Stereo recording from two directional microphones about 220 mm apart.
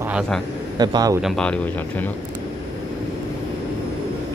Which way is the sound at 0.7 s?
15° right (ahead or behind).